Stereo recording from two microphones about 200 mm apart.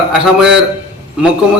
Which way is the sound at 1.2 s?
5° right (ahead or behind).